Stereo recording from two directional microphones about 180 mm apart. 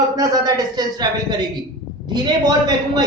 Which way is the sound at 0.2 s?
20° right (ahead or behind).